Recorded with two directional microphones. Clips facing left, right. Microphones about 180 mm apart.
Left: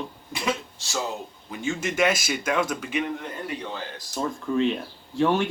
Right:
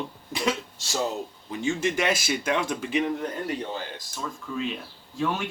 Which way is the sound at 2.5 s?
30° right (ahead or behind).